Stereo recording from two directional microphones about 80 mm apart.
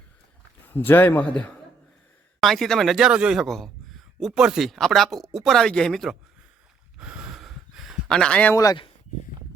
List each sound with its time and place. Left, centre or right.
0.7 s a man's voice: left
2.4 s a man's voice: centre
3.4 s a sound: centre
4.4 s speech: centre
7.0 s a sound: centre
8.1 s speech: centre
8.5 s speech: left